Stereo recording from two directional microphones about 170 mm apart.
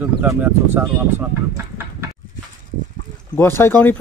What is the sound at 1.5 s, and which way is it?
Chicken, 15° right (ahead or behind).